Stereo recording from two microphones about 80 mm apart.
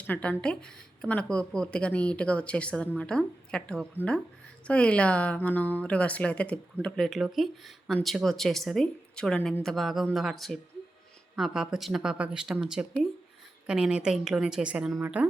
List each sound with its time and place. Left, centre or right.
0.1 s a woman's voice: centre